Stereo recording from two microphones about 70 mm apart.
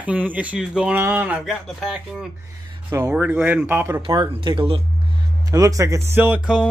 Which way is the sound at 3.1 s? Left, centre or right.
Right.